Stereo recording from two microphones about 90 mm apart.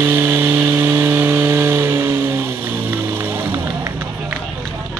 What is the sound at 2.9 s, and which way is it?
Music, 25° right (ahead or behind).